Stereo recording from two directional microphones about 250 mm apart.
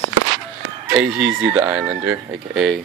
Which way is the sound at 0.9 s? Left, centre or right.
Centre.